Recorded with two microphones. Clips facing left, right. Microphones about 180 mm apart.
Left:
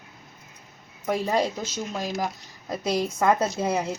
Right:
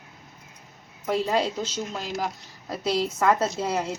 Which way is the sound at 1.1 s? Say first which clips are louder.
Even; 10° left (ahead or behind).